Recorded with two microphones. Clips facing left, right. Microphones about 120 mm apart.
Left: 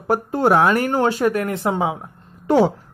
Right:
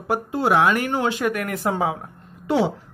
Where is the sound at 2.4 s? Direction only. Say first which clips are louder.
Left 5 dB; 45° left (ahead or behind).